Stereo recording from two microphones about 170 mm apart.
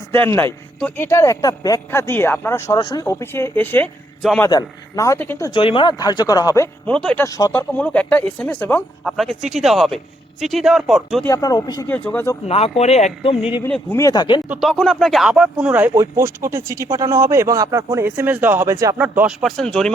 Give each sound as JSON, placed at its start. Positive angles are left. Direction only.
{"t": 0.1, "sound": "a man's voice", "side_deg": 15}
{"t": 4.4, "sound": "speech", "side_deg": 20}
{"t": 5.5, "sound": "speech", "side_deg": 30}
{"t": 6.8, "sound": "a man's voice", "side_deg": 5}
{"t": 7.3, "sound": "speech", "side_deg": 20}
{"t": 7.7, "sound": "a man's voice", "side_deg": 10}
{"t": 11.3, "sound": "speech", "side_deg": 20}
{"t": 11.9, "sound": "a man's voice", "side_deg": 10}
{"t": 12.5, "sound": "speech", "side_deg": 35}
{"t": 13.9, "sound": "speech", "side_deg": 20}
{"t": 14.4, "sound": "speech", "side_deg": -10}
{"t": 14.7, "sound": "speech", "side_deg": 5}